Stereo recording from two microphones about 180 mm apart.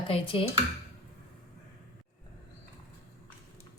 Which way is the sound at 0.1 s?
30° left (ahead or behind).